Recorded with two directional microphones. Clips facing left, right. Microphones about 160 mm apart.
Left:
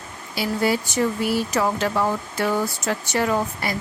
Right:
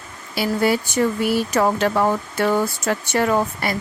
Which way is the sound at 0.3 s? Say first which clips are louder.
Right 3 dB; 60° right (ahead or behind).